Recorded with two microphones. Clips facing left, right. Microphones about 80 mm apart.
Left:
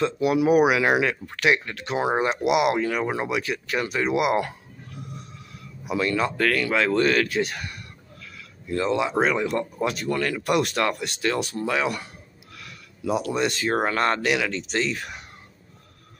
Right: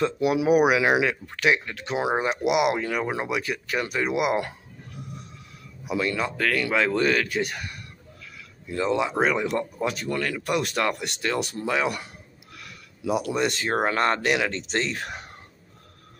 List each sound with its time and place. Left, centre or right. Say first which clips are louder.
0.0 s speech: left 1 dB; centre
5.9 s speech: left 2 dB; centre
9.0 s speech: left 1 dB; centre
9.3 s speech: left 1 dB; centre
9.8 s speech: left 2 dB; centre; by 14.5 s right
14.5 s speech: left 1 dB; right